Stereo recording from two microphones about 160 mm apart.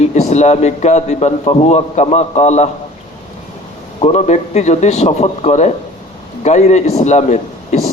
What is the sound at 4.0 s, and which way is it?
A man's voice, 40° left (ahead or behind).